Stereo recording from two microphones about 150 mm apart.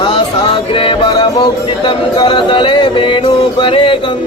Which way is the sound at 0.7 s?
35° left (ahead or behind).